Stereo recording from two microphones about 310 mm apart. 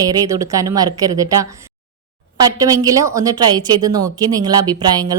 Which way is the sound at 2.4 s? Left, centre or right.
Centre.